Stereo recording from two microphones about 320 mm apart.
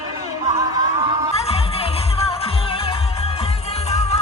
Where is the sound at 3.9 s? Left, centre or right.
Centre.